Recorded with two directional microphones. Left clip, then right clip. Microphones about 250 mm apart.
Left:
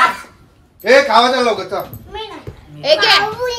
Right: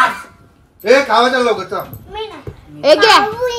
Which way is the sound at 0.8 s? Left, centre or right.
Left.